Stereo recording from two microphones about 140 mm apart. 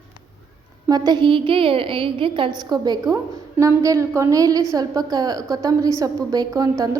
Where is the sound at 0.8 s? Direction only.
30° right (ahead or behind).